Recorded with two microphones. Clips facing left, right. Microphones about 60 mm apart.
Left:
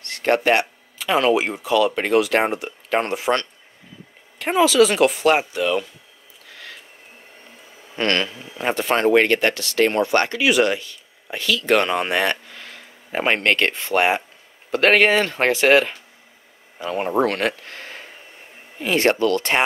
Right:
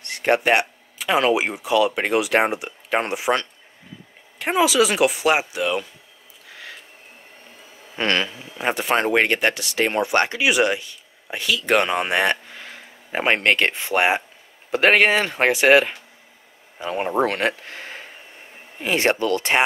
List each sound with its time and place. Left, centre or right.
0.0 s speech: centre
7.9 s speech: centre